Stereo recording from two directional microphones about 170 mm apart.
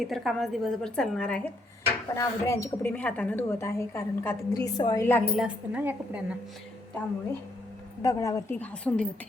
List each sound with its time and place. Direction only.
0.0 s a woman's voice: centre (ahead or behind)
2.1 s a woman's voice: 20° left (ahead or behind)
5.0 s a woman's voice: 10° left (ahead or behind)
5.3 s a woman's voice: centre (ahead or behind)
8.0 s a woman's voice: 20° left (ahead or behind)